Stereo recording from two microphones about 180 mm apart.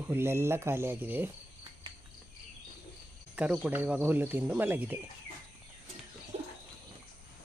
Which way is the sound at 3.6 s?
10° right (ahead or behind).